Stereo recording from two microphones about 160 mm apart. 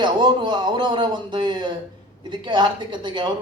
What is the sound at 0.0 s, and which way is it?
Speech, 30° right (ahead or behind).